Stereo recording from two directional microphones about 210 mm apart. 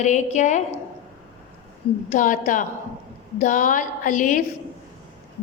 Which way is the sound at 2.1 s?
40° left (ahead or behind).